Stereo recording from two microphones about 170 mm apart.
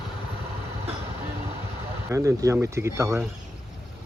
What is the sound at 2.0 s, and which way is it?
A man's voice, 20° right (ahead or behind).